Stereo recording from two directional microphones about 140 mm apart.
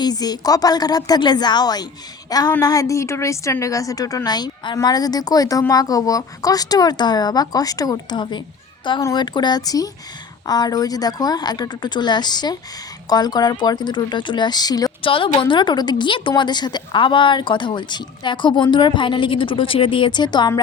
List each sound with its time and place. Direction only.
0.0 s a woman's voice: 30° left (ahead or behind)
15.0 s a woman's voice: 40° left (ahead or behind)